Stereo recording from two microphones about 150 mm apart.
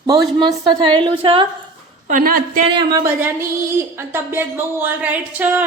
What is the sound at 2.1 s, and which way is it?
Speech, 70° right (ahead or behind).